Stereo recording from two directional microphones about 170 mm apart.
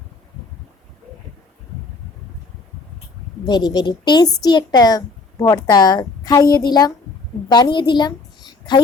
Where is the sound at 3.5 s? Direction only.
25° left (ahead or behind).